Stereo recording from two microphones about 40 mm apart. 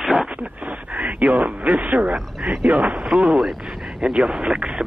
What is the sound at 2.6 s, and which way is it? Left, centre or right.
Speech, right.